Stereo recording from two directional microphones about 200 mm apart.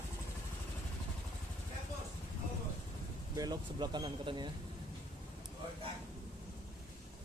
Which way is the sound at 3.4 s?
20° right (ahead or behind).